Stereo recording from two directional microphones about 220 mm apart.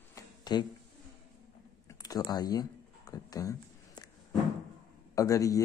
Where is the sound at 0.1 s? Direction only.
20° left (ahead or behind).